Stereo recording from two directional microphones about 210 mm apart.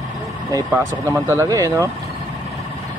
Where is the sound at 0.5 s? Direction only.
10° right (ahead or behind).